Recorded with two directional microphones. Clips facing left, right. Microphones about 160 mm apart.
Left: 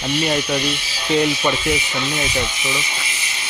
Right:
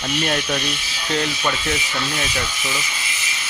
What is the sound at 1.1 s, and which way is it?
Rub, 15° left (ahead or behind).